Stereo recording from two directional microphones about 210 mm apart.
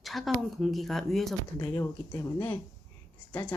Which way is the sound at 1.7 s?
15° left (ahead or behind).